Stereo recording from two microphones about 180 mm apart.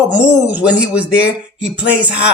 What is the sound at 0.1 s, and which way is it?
Speech, 5° right (ahead or behind).